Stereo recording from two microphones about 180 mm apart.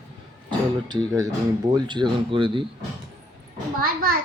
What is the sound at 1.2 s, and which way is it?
Speech, 20° right (ahead or behind).